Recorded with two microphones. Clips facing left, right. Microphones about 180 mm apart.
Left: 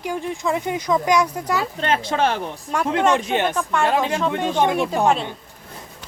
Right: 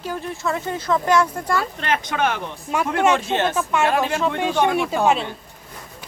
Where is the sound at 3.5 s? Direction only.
5° right (ahead or behind).